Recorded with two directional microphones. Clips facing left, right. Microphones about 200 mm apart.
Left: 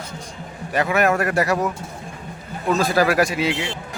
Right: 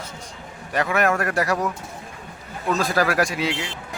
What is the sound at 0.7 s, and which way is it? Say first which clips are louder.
Speech: left 2 dB; 5° left (ahead or behind).